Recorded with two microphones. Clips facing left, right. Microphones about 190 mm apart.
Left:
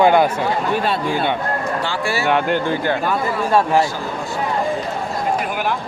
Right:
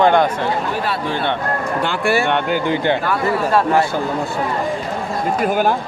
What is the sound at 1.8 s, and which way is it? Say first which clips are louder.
Speech: right 4 dB; 55° right (ahead or behind).